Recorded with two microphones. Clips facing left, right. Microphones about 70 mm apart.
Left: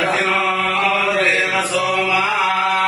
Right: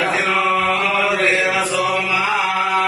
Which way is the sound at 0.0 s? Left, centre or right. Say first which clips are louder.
Even; centre.